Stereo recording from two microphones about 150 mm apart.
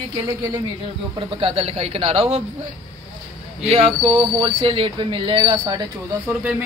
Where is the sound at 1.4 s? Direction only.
40° right (ahead or behind).